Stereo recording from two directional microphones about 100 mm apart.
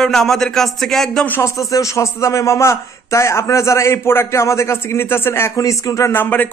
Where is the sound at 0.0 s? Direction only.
5° left (ahead or behind).